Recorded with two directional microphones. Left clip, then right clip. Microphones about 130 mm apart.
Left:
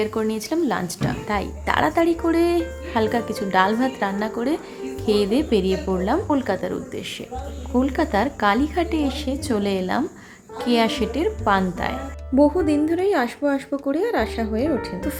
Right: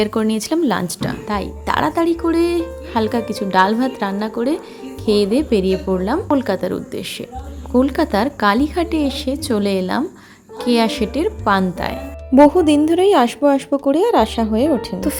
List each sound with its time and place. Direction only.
0.0 s speech: 45° right (ahead or behind)
1.3 s a woman's voice: 25° right (ahead or behind)
12.3 s speech: 60° right (ahead or behind)